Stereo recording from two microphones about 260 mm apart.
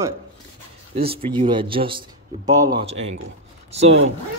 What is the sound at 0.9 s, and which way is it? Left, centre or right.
Speech, right.